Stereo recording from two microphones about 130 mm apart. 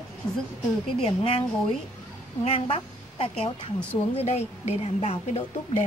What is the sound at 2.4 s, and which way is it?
A woman's voice, 45° left (ahead or behind).